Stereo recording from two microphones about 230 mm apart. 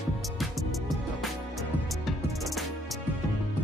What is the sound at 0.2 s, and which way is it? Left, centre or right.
Music, centre.